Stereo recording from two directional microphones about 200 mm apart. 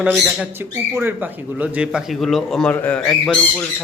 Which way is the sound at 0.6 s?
10° right (ahead or behind).